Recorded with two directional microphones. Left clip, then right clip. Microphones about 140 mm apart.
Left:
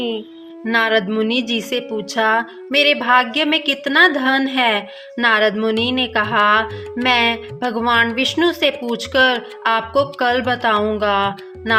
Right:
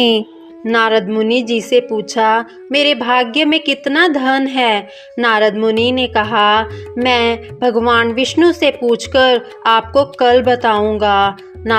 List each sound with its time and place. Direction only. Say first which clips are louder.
0.6 s a woman's voice: right 3 dB; 50° right (ahead or behind)